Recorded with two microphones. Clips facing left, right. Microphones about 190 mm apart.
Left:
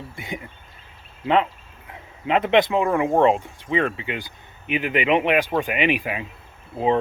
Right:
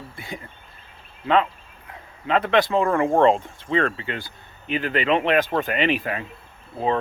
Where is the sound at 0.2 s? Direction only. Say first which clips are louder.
Left 3 dB; 15° left (ahead or behind).